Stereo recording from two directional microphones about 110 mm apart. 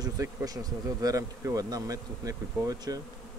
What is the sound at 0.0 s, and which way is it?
Speech, 30° right (ahead or behind).